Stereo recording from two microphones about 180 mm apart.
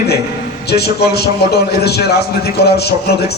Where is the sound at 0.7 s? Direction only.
65° left (ahead or behind).